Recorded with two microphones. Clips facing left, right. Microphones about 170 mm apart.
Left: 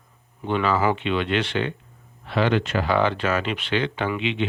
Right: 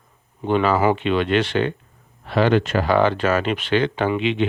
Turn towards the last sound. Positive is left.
turn(degrees=-45)  # may be behind; listen again after turning